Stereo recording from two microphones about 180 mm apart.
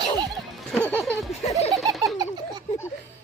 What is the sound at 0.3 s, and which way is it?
Music, 5° left (ahead or behind).